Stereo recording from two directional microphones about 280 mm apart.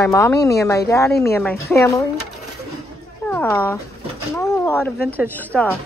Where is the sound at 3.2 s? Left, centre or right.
Centre.